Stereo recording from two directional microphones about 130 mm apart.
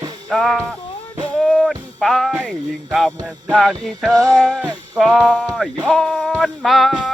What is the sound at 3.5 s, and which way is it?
Speech, centre (ahead or behind).